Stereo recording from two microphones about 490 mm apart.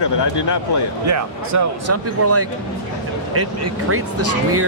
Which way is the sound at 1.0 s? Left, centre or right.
Right.